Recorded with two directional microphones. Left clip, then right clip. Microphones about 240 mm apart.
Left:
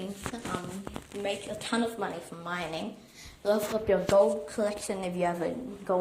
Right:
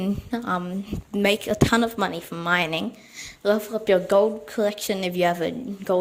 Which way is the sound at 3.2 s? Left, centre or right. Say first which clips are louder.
Right 5 dB; right.